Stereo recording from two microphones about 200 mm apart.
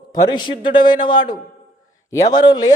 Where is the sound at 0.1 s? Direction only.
20° left (ahead or behind).